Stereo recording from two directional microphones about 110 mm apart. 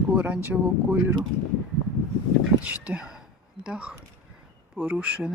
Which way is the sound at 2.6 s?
10° right (ahead or behind).